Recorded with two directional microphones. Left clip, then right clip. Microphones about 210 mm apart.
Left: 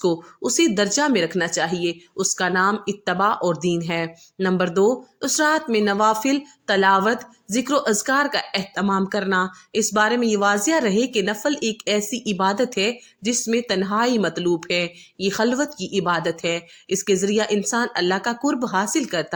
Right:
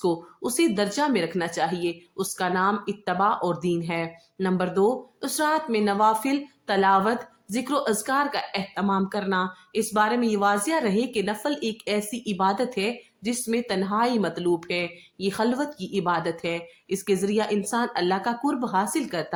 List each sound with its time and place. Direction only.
0.0 s a woman's voice: 20° left (ahead or behind)